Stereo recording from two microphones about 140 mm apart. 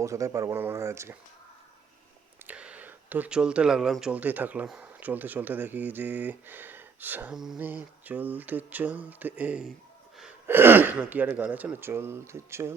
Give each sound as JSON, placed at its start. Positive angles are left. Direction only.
{"t": 0.0, "sound": "speech", "side_deg": -20}
{"t": 2.5, "sound": "speech", "side_deg": -10}